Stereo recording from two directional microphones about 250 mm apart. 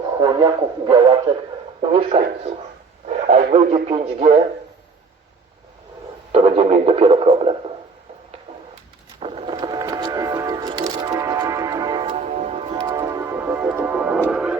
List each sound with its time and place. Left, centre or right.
0.2 s speech: centre
6.3 s speech: right
9.2 s music: right; by 14.5 s centre